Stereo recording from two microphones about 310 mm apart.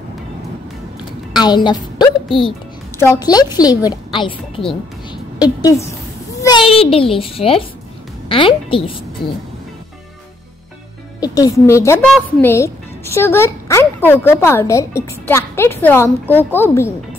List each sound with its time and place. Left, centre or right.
1.3 s a woman's voice: centre
5.1 s a sound: centre
6.4 s speech: centre
11.1 s speech: centre